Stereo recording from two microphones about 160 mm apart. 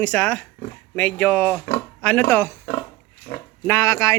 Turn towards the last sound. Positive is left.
turn(degrees=20)  # may be behind; listen again after turning